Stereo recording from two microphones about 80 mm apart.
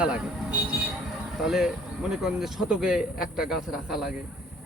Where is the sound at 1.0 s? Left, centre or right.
Centre.